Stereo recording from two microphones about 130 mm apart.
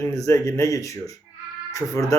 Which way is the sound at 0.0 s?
25° left (ahead or behind).